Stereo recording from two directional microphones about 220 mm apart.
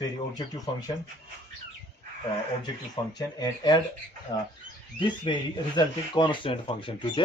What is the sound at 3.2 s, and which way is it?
Speech, 15° left (ahead or behind).